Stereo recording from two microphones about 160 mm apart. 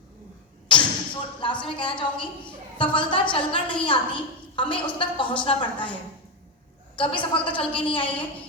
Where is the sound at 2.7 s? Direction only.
30° left (ahead or behind).